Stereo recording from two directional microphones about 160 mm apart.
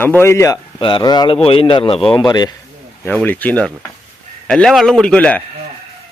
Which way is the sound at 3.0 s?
10° left (ahead or behind).